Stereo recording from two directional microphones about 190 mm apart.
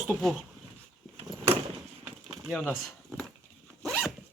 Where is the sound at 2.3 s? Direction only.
20° right (ahead or behind).